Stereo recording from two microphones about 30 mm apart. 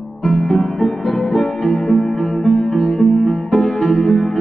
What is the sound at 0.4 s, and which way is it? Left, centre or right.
Music, centre.